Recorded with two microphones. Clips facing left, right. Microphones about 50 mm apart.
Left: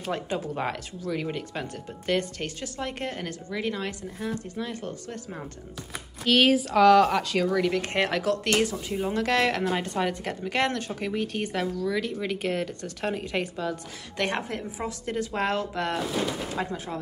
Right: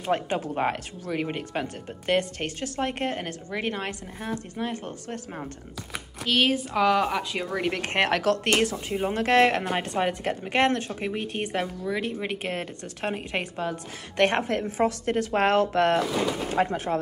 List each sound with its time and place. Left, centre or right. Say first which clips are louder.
0.0 s speech: right 4 dB; right
6.2 s speech: left 3 dB; centre
7.5 s a woman's voice: left 1 dB; right